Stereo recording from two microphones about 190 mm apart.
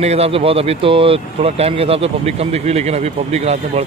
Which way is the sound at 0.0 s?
35° right (ahead or behind).